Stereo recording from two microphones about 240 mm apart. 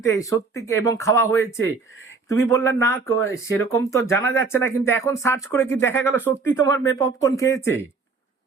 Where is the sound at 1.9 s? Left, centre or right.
Left.